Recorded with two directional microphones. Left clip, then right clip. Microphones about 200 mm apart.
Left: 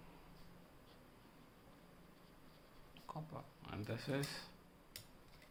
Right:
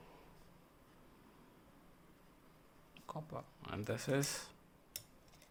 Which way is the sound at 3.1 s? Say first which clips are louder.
Right 4 dB; 45° right (ahead or behind).